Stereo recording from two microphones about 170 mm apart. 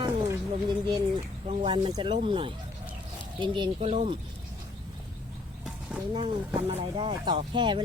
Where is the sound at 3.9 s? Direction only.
40° right (ahead or behind).